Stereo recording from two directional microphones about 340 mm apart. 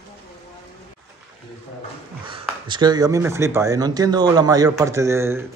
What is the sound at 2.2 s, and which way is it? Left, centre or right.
Speech, centre.